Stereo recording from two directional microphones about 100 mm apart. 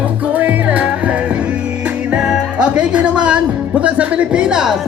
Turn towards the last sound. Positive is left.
turn(degrees=-5)  # may be behind; listen again after turning